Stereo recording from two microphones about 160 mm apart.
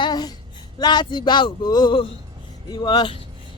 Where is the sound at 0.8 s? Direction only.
25° left (ahead or behind).